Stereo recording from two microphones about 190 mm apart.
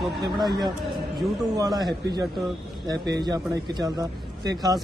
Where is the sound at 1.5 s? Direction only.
20° right (ahead or behind).